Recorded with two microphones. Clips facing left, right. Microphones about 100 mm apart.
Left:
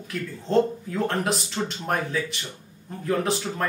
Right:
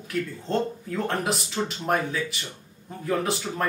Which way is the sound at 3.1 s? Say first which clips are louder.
Left 1 dB; 5° right (ahead or behind).